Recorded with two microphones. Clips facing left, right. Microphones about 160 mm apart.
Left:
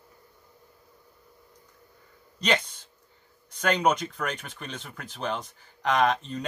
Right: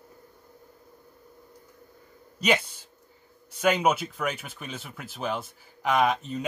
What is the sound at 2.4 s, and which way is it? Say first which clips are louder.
Speech: right 2 dB; 10° right (ahead or behind).